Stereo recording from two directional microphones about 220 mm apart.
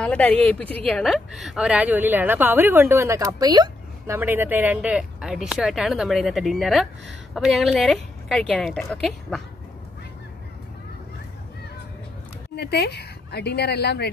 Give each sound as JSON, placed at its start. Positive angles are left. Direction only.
{"t": 0.0, "sound": "a woman's voice", "side_deg": 5}
{"t": 12.5, "sound": "speech", "side_deg": 45}